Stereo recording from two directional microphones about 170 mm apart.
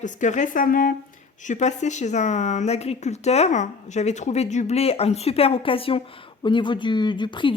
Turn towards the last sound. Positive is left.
turn(degrees=30)  # may be behind; listen again after turning